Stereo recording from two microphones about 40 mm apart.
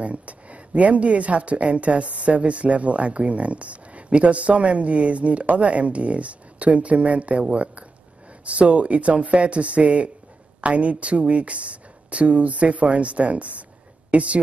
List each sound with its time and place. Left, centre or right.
0.0 s a woman's voice: right